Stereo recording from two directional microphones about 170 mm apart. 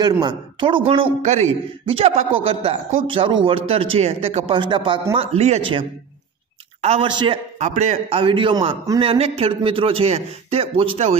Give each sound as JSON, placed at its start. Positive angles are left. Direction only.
{"t": 0.0, "sound": "a man's voice", "side_deg": -25}
{"t": 7.1, "sound": "a man's voice", "side_deg": -25}
{"t": 7.5, "sound": "speech", "side_deg": -45}
{"t": 8.2, "sound": "a man's voice", "side_deg": -30}
{"t": 9.0, "sound": "a man's voice", "side_deg": -35}